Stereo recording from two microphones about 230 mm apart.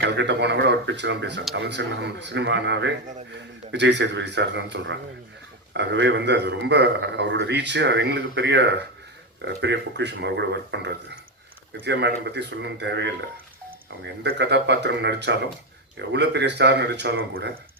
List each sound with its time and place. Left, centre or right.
0.0 s a man's voice: right